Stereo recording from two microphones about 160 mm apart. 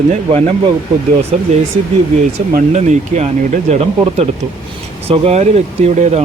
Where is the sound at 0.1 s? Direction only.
45° right (ahead or behind).